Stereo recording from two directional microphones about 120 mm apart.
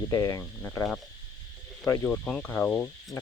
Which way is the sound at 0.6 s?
20° left (ahead or behind).